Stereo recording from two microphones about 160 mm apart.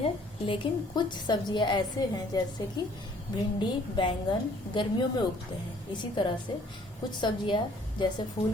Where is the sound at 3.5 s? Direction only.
30° left (ahead or behind).